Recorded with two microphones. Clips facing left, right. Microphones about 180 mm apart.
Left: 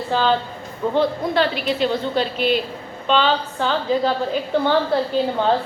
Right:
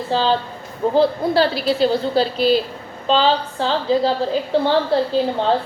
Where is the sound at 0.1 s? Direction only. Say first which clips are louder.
Right 1 dB; 30° right (ahead or behind).